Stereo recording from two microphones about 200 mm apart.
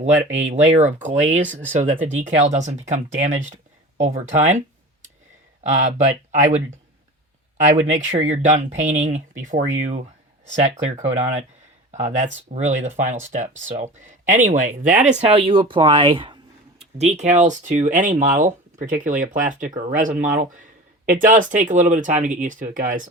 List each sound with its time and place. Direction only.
0.5 s speech: 35° right (ahead or behind)
5.6 s speech: 35° right (ahead or behind)
7.6 s speech: 35° right (ahead or behind)